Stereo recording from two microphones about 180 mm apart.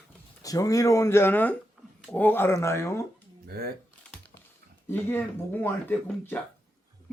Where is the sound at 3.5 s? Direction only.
60° right (ahead or behind).